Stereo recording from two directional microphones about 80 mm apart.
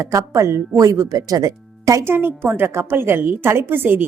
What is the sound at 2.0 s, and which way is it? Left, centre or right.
A woman's voice, right.